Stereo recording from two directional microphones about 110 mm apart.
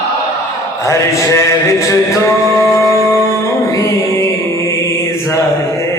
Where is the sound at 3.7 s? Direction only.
30° left (ahead or behind).